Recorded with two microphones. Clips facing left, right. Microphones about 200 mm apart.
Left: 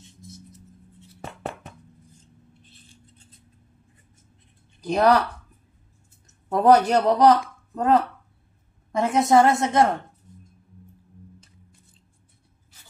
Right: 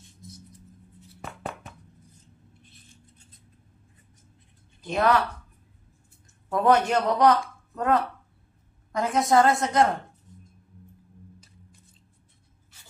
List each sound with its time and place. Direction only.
4.8 s speech: 40° left (ahead or behind)
6.2 s a woman's voice: 40° left (ahead or behind)